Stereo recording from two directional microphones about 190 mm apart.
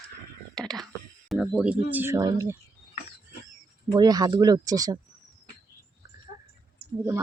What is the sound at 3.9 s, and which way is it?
Speech, 20° right (ahead or behind).